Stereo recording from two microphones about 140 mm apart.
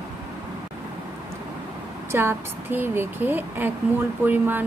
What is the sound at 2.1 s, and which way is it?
Speech, 15° right (ahead or behind).